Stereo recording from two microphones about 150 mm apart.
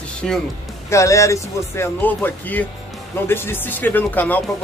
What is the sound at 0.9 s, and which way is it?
Speech, 20° left (ahead or behind).